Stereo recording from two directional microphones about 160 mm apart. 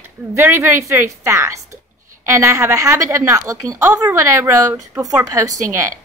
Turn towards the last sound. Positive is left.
turn(degrees=-20)  # may be behind; listen again after turning